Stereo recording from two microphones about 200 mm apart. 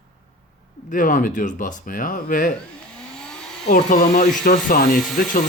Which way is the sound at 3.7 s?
40° left (ahead or behind).